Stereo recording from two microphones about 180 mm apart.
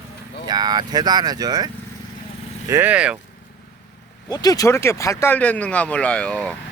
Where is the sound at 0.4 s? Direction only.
25° right (ahead or behind); by 3.2 s 5° right (ahead or behind).